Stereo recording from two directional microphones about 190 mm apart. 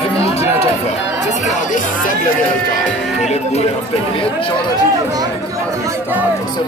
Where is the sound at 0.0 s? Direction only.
35° left (ahead or behind).